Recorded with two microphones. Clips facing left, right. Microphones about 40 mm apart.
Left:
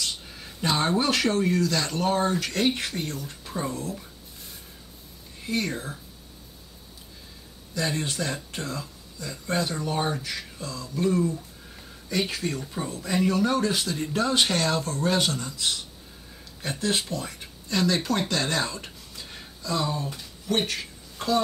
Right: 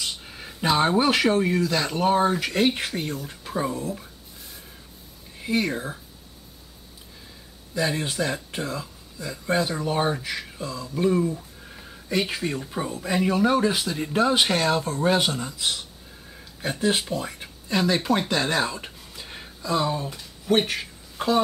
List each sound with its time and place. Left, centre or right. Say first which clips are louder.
0.0 s speech: right 1 dB; centre
5.4 s speech: right 4 dB; centre
7.7 s speech: right 3 dB; centre
18.3 s a sound: right 3 dB; centre